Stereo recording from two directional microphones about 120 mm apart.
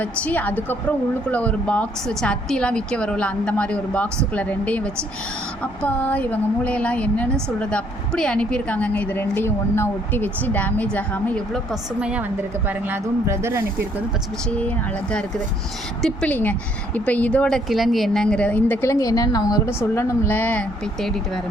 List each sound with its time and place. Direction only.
0.0 s speech: 15° left (ahead or behind)
11.7 s a woman's voice: 10° right (ahead or behind)
14.5 s speech: 10° left (ahead or behind)